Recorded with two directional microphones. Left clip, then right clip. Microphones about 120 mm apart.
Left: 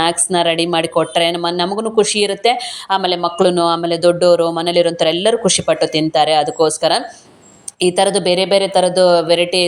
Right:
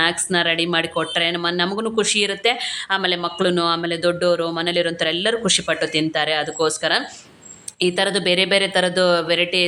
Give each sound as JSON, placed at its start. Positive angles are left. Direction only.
{"t": 0.0, "sound": "speech", "side_deg": 30}